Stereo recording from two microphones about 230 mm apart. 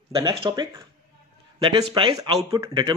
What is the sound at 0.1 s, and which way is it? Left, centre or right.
Speech, centre.